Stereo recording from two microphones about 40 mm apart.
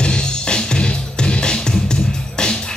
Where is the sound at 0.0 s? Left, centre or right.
Left.